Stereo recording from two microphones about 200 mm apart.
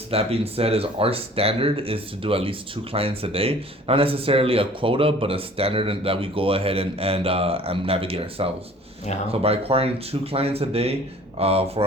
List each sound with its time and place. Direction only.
0.1 s speech: 30° right (ahead or behind)